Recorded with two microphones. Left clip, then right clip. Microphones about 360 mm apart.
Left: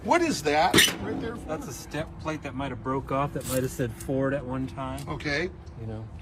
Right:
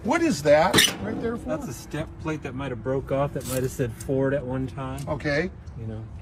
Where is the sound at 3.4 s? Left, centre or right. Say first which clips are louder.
Right 1 dB; centre.